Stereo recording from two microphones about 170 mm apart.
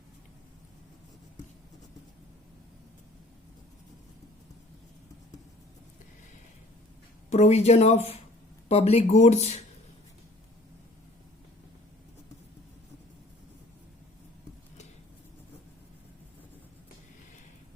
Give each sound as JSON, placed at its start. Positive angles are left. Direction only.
{"t": 7.3, "sound": "speech", "side_deg": 40}